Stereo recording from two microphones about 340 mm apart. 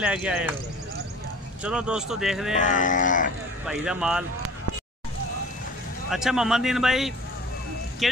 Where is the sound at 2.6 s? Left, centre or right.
Left.